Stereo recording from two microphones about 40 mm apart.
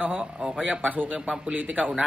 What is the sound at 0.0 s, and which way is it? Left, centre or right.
A man's voice, right.